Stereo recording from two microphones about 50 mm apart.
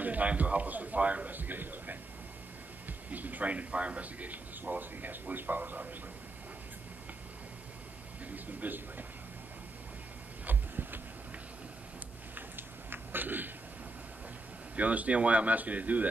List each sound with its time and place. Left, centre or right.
0.0 s a man's voice: right
3.1 s a man's voice: right
8.5 s a man's voice: right
10.4 s a sound: right
12.4 s a sound: right
14.8 s speech: right